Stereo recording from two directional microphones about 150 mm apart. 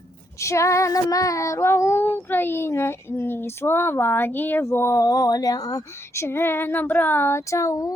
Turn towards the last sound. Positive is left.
turn(degrees=20)  # may be behind; listen again after turning